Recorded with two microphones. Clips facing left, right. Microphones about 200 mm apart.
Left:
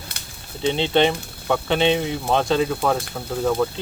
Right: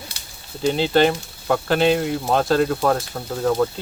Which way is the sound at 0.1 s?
55° left (ahead or behind).